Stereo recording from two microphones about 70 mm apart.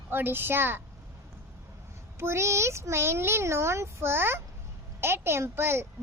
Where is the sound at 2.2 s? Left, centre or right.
Right.